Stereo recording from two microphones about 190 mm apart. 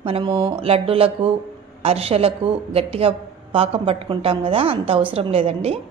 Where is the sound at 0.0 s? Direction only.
25° right (ahead or behind).